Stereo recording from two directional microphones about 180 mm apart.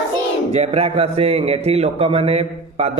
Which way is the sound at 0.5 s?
35° right (ahead or behind).